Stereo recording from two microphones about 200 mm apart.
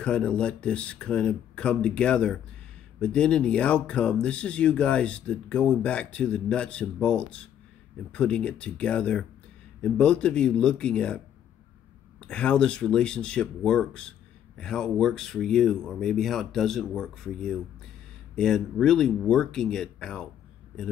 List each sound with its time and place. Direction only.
0.0 s speech: 5° left (ahead or behind)
12.2 s speech: 5° left (ahead or behind)